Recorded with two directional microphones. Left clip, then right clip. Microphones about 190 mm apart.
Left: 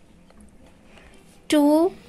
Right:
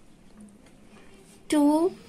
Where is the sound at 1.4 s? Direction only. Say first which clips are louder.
Left 4 dB; 15° left (ahead or behind).